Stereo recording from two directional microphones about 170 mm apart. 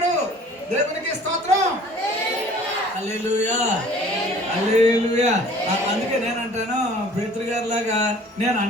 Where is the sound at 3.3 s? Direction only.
40° right (ahead or behind).